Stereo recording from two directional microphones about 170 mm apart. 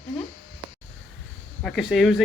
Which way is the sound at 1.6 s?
Centre (ahead or behind).